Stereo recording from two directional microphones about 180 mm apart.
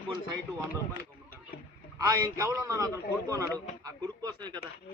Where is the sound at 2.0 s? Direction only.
20° right (ahead or behind).